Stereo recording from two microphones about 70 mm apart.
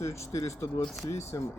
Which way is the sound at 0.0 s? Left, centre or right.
Left.